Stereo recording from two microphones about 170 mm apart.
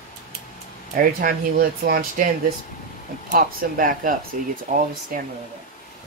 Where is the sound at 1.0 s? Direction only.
55° right (ahead or behind).